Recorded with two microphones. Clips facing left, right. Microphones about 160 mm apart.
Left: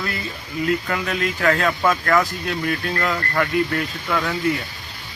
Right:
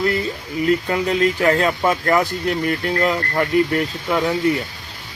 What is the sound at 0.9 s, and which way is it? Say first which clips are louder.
Speech: right 6 dB; 25° right (ahead or behind).